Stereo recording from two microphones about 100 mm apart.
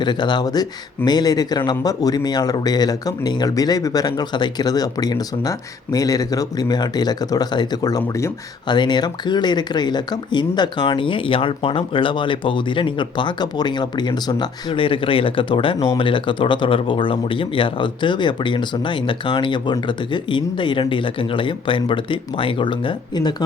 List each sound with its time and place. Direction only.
0.0 s speech: 50° left (ahead or behind)